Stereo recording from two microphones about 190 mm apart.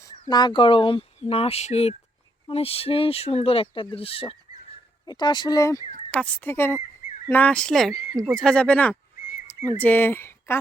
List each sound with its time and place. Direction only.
0.0 s speech: 20° left (ahead or behind)